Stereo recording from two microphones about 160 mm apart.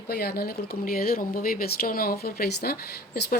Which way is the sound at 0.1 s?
75° left (ahead or behind).